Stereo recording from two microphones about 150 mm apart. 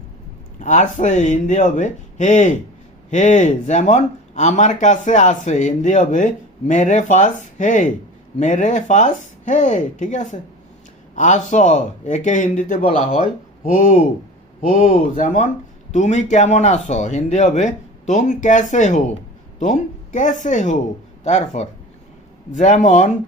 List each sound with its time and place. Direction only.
0.6 s speech: 55° left (ahead or behind)
14.7 s speech: 60° left (ahead or behind)